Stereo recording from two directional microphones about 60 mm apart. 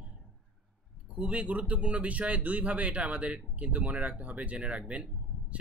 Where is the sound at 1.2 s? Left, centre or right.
Right.